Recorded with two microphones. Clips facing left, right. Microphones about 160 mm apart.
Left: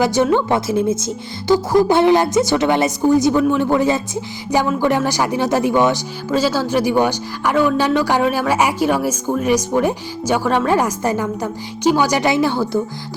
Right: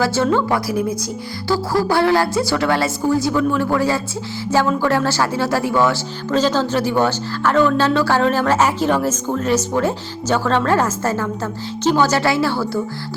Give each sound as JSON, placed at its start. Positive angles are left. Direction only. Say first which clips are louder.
{"t": 0.0, "sound": "a woman's voice", "louder": "left 2 dB", "side_deg": 20}